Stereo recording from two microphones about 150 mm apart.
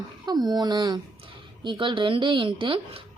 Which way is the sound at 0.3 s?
25° right (ahead or behind).